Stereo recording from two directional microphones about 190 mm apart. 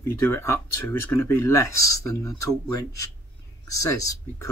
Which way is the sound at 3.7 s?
15° left (ahead or behind).